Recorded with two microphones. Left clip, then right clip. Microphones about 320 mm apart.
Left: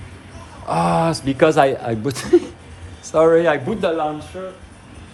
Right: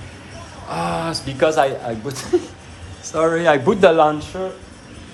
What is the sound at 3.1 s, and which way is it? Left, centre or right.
Speech, centre.